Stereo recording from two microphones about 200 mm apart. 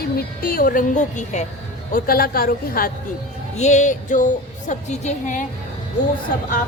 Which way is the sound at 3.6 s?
35° left (ahead or behind).